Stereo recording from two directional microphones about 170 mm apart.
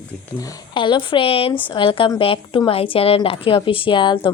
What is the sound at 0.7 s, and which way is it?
A woman's voice, 30° left (ahead or behind).